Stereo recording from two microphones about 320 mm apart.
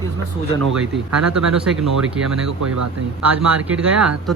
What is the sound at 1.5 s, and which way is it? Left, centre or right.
Speech, centre.